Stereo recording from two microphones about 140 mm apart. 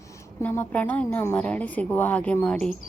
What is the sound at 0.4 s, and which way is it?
A woman's voice, 15° left (ahead or behind).